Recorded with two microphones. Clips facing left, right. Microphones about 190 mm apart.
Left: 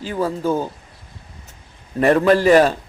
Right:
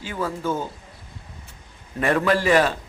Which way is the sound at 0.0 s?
35° left (ahead or behind).